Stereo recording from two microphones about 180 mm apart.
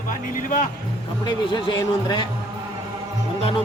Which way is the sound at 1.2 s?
25° left (ahead or behind).